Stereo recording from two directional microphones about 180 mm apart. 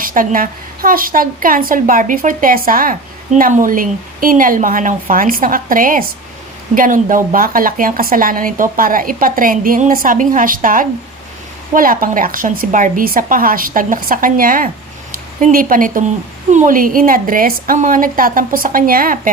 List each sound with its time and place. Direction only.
0.0 s a woman's voice: 50° right (ahead or behind)